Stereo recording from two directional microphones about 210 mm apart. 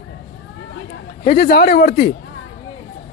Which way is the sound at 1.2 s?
45° left (ahead or behind).